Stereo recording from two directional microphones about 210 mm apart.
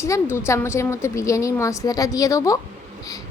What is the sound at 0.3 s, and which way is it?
A woman's voice, 15° left (ahead or behind).